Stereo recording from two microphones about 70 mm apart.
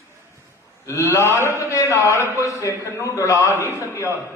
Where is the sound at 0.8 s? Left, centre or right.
Left.